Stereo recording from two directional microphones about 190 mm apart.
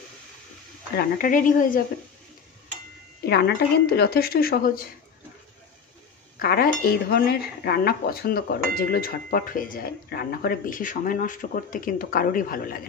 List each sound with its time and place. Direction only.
0.9 s speech: 45° left (ahead or behind)
3.3 s speech: 60° left (ahead or behind)
6.4 s speech: 50° left (ahead or behind)